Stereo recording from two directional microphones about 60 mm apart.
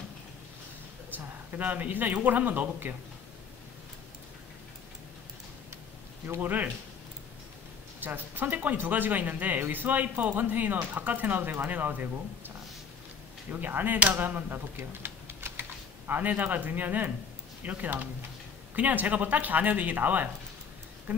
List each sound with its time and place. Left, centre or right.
1.1 s speech: right
6.2 s speech: right
8.0 s speech: right
16.1 s speech: right